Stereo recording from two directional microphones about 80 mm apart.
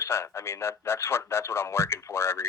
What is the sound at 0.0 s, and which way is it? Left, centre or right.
Speech, left.